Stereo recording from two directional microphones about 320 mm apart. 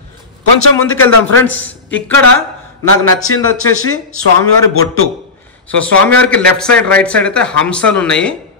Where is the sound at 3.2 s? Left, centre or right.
Left.